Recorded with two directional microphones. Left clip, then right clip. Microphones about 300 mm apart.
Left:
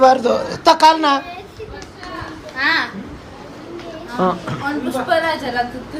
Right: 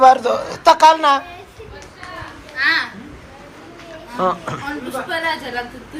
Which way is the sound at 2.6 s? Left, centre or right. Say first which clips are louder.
Even; left.